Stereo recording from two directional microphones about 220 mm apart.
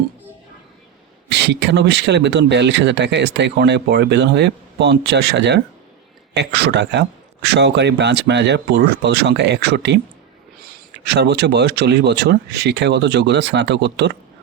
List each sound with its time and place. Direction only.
1.3 s speech: 50° right (ahead or behind)
11.0 s speech: 50° right (ahead or behind)